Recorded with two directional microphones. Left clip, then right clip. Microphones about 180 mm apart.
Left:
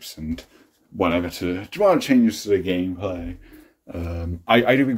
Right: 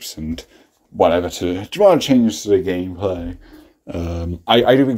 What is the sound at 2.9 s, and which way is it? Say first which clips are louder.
Speech: right 6 dB; 40° right (ahead or behind).